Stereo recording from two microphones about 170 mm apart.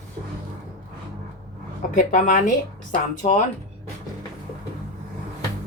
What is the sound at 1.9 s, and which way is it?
Speech, 50° left (ahead or behind).